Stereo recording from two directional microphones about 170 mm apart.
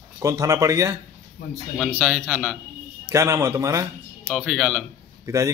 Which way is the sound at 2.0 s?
5° right (ahead or behind).